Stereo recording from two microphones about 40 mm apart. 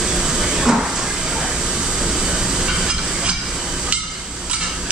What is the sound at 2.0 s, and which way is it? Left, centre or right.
Train, centre.